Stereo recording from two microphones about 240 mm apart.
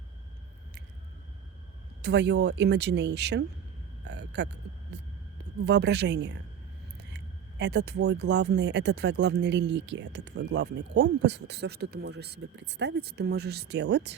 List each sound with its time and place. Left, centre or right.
2.0 s speech: right
4.0 s a sound: right
4.9 s hum: right
5.6 s speech: right
7.6 s speech: right